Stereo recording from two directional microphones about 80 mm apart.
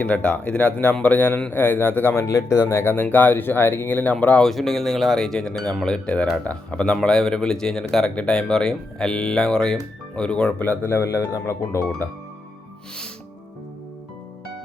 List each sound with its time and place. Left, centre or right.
0.0 s speech: centre
2.2 s speech: left; by 4.4 s centre
4.4 s speech: centre
10.6 s speech: left